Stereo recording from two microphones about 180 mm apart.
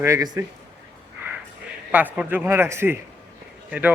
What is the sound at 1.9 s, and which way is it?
A man's voice, 5° right (ahead or behind).